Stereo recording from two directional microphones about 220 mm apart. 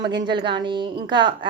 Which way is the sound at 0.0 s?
20° right (ahead or behind).